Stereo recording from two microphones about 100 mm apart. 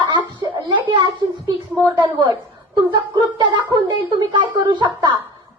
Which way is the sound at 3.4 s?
40° right (ahead or behind).